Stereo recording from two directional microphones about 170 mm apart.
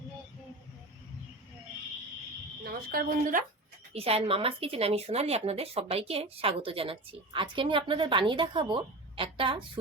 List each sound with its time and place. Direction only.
2.6 s speech: 60° right (ahead or behind)
3.9 s speech: 35° right (ahead or behind)